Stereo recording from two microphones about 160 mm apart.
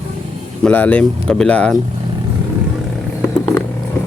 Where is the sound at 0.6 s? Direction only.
10° left (ahead or behind).